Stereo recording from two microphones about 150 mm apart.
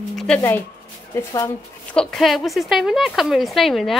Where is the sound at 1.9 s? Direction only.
5° left (ahead or behind).